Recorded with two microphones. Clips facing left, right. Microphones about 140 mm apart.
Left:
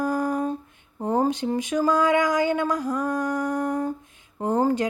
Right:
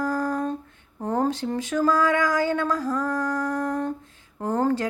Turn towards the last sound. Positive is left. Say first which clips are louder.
# left 1 dB
turn(degrees=15)  # may be behind; listen again after turning